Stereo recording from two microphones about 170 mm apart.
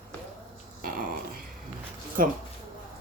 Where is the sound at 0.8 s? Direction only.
60° right (ahead or behind).